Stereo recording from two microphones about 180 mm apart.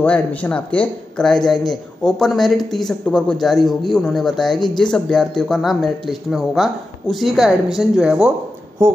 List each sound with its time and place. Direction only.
0.0 s speech: 10° left (ahead or behind)